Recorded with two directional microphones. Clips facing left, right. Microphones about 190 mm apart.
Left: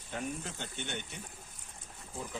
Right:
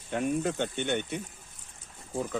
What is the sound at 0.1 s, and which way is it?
Speech, 70° right (ahead or behind).